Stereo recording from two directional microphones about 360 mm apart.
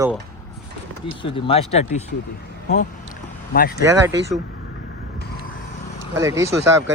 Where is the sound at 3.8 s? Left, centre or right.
Centre.